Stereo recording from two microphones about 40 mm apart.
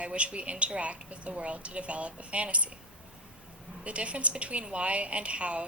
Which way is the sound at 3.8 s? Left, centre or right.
Right.